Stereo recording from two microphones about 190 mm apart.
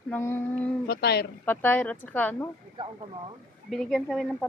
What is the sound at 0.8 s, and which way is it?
Speech, 60° left (ahead or behind).